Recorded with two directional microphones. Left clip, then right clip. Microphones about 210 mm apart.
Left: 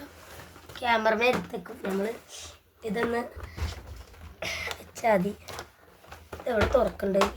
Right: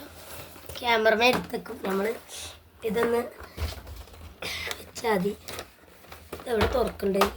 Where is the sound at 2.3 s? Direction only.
5° left (ahead or behind).